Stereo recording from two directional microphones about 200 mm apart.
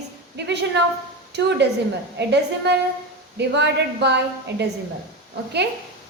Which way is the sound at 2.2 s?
60° right (ahead or behind).